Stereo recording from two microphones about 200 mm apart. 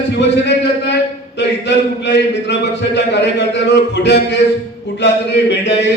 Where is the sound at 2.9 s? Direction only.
60° left (ahead or behind).